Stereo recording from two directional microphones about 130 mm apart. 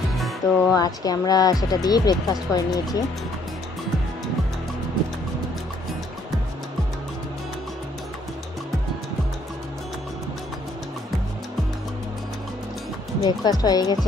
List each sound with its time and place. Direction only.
0.4 s speech: 25° left (ahead or behind)
13.2 s speech: 30° left (ahead or behind)